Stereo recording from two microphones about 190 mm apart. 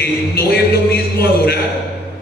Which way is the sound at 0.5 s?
55° left (ahead or behind).